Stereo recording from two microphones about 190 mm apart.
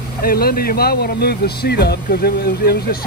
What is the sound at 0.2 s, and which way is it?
Speech, 50° left (ahead or behind).